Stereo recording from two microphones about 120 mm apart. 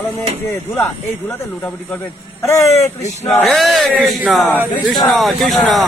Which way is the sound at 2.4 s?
25° left (ahead or behind).